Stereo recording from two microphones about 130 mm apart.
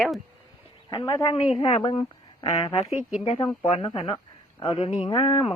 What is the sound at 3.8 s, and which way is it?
Speech, 45° left (ahead or behind).